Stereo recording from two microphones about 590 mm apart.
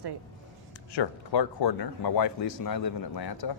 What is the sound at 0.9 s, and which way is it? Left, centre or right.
Speech, left.